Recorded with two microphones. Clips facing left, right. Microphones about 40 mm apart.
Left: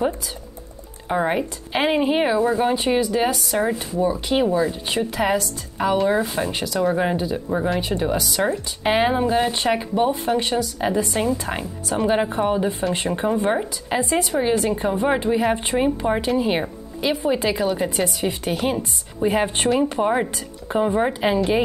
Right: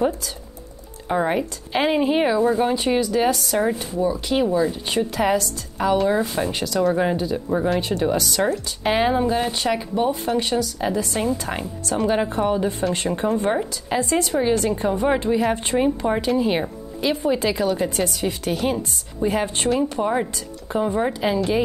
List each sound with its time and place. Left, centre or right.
1.0 s speech: centre
4.0 s speech: centre
19.4 s speech: left